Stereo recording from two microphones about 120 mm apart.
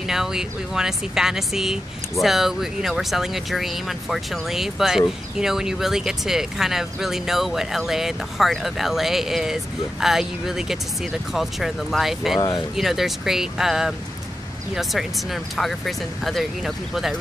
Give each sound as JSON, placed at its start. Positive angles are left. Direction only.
{"t": 0.0, "sound": "speech", "side_deg": -5}